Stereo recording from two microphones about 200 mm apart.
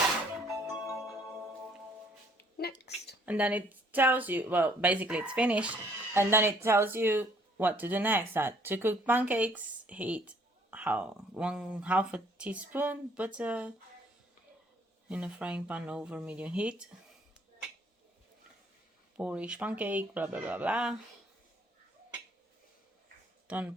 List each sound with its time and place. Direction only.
0.7 s music: centre (ahead or behind)
2.4 s music: 50° left (ahead or behind)
3.2 s speech: 5° right (ahead or behind)
15.1 s speech: 5° right (ahead or behind)
19.1 s speech: 5° right (ahead or behind)
23.5 s speech: 5° right (ahead or behind)